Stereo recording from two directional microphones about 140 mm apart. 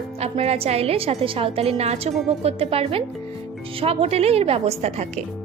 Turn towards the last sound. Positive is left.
turn(degrees=-50)  # may be behind; listen again after turning